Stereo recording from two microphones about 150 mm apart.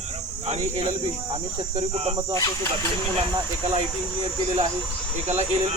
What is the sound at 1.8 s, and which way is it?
Cricket, 40° right (ahead or behind).